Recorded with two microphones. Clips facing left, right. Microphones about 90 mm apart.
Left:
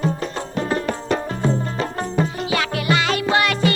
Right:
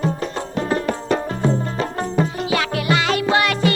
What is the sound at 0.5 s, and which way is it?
Music, 15° right (ahead or behind).